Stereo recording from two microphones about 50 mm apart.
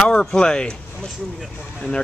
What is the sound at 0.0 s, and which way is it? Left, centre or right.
Speech, centre.